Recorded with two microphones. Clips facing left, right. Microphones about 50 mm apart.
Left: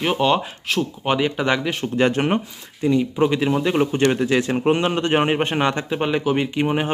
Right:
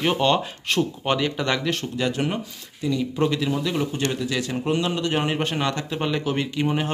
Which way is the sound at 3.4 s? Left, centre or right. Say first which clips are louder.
Left 5 dB; left.